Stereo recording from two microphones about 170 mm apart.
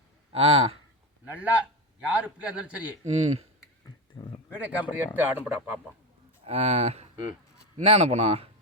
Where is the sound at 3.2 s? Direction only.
40° right (ahead or behind).